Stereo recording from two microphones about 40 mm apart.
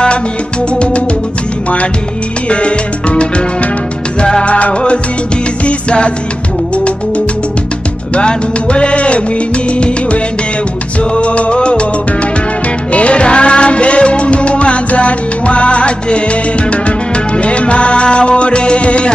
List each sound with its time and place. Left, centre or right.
2.5 s music: left
8.1 s music: left
12.9 s music: left
17.4 s music: left